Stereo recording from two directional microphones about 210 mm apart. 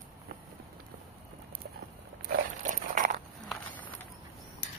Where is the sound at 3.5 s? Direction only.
10° left (ahead or behind).